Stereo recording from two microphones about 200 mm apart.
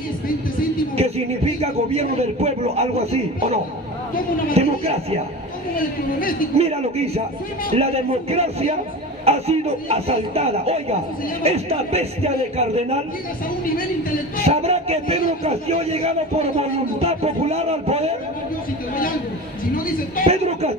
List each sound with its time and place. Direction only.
0.9 s a man's voice: 30° right (ahead or behind)
4.6 s a man's voice: 30° right (ahead or behind)
6.6 s a man's voice: 30° right (ahead or behind)
14.4 s a man's voice: 30° right (ahead or behind)
20.2 s a man's voice: 30° right (ahead or behind)